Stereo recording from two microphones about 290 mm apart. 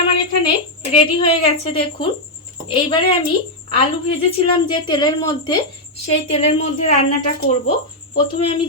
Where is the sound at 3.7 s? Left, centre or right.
Centre.